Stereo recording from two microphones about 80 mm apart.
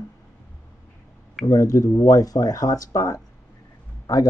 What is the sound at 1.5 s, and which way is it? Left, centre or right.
Speech, left.